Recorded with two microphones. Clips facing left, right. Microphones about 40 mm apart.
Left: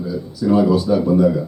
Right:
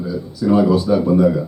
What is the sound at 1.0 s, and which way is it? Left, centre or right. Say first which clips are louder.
Speech: right 1 dB; right.